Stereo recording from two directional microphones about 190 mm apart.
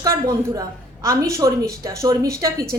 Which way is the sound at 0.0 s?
20° right (ahead or behind).